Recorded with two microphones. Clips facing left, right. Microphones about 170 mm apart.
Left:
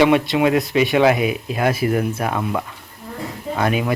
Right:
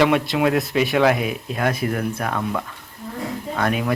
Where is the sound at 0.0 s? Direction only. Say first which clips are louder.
Left 3 dB; centre (ahead or behind).